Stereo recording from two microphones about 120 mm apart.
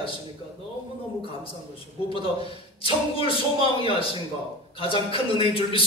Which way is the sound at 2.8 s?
50° left (ahead or behind).